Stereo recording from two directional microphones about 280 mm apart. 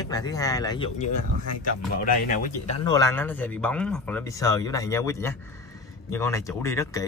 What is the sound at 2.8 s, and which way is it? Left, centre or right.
Speech, centre.